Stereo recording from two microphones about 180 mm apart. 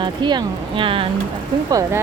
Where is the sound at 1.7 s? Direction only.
20° right (ahead or behind).